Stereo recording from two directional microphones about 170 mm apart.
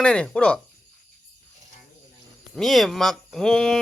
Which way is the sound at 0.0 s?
5° left (ahead or behind).